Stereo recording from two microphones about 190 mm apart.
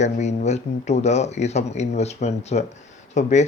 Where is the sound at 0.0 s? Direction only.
35° left (ahead or behind).